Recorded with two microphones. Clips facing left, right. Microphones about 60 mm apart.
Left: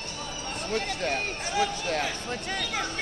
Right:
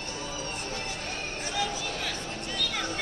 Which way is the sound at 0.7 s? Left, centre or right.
Left.